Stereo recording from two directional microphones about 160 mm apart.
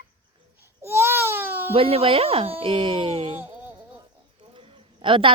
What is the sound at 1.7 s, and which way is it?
Speech, 35° right (ahead or behind).